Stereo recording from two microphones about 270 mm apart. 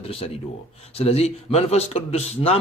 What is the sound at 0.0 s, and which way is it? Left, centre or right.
A man's voice, left.